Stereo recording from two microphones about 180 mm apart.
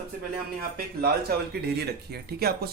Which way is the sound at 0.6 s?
55° right (ahead or behind).